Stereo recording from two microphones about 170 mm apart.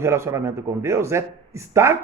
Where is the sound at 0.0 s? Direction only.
15° right (ahead or behind).